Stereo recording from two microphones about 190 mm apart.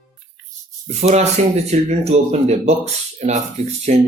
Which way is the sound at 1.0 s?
35° right (ahead or behind).